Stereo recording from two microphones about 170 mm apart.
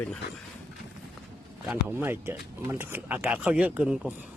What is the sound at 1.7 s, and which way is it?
Speech, 10° right (ahead or behind).